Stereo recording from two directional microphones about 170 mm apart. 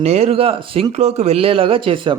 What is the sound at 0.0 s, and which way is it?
Speech, 40° right (ahead or behind).